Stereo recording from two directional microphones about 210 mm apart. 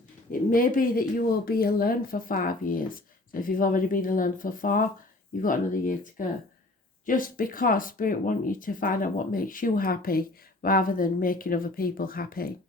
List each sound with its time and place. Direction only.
0.3 s speech: 40° left (ahead or behind)